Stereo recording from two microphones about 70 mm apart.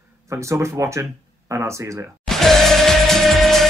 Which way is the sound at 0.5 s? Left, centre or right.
Right.